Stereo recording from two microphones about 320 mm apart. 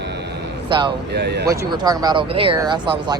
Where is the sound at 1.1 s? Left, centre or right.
Right.